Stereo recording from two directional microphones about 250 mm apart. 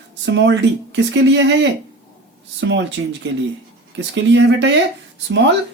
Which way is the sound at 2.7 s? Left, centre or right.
Right.